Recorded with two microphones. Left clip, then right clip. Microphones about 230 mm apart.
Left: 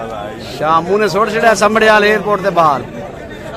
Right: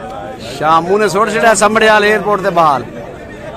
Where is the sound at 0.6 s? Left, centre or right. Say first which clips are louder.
Right 2 dB; centre.